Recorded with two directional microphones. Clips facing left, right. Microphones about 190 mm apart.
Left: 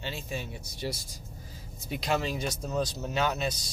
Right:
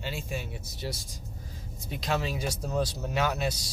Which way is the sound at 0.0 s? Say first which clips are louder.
Right 1 dB; 5° right (ahead or behind).